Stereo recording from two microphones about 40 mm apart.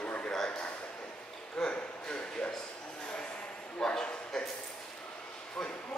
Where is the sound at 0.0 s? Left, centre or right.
Left.